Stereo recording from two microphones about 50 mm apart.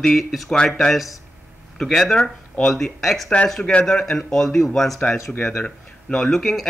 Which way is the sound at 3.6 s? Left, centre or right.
Centre.